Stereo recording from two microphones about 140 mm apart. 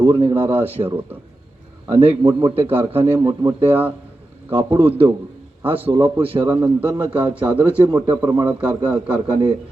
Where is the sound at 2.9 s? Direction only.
45° right (ahead or behind).